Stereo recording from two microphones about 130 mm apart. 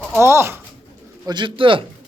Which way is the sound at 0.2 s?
20° right (ahead or behind).